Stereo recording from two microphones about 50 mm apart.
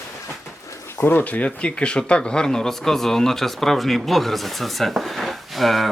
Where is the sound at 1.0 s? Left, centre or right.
Left.